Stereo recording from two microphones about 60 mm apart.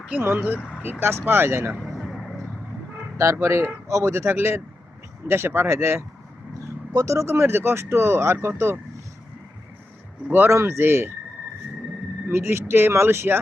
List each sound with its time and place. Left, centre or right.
0.2 s speech: right
1.8 s vehicle: centre
3.4 s speech: right
5.6 s speech: right
6.9 s speech: right
10.2 s speech: right
10.5 s speech: right
12.3 s speech: right